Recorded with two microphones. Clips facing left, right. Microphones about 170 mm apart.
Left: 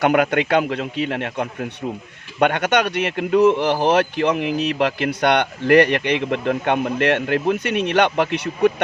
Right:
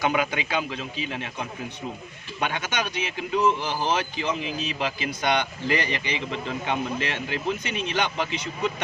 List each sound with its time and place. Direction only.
0.0 s a man's voice: 65° left (ahead or behind)